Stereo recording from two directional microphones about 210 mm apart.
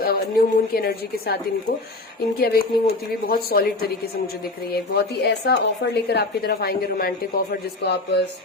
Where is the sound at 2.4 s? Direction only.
50° left (ahead or behind).